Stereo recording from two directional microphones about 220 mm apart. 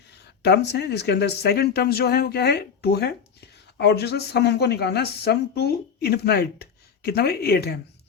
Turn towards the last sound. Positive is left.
turn(degrees=45)  # may be behind; listen again after turning